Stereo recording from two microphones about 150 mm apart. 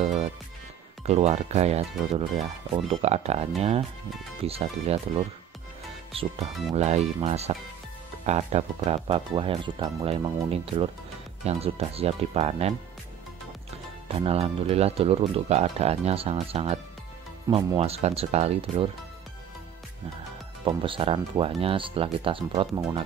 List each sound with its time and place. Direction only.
0.0 s music: 50° right (ahead or behind)
1.0 s speech: 45° right (ahead or behind)
14.0 s speech: 40° right (ahead or behind)
20.6 s speech: 35° right (ahead or behind)